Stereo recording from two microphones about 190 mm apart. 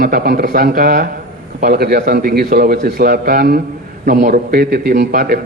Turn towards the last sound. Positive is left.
turn(degrees=-50)  # may be behind; listen again after turning